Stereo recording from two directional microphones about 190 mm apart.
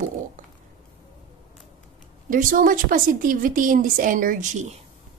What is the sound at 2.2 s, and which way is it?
A woman's voice, 45° right (ahead or behind).